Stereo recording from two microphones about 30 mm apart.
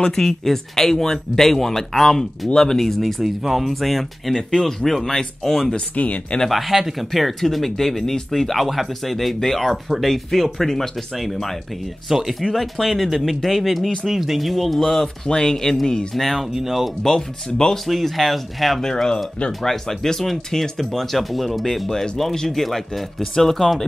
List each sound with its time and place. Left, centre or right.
0.1 s speech: centre
6.5 s speech: centre
14.0 s speech: centre
14.5 s speech: centre
16.2 s speech: centre
16.5 s speech: centre
17.6 s speech: centre
18.1 s speech: centre
18.8 s speech: centre